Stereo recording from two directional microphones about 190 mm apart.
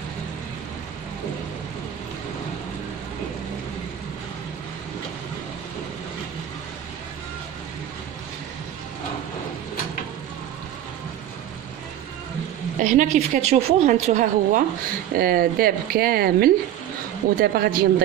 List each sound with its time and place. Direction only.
12.7 s a woman's voice: 40° right (ahead or behind)
15.1 s speech: 50° right (ahead or behind)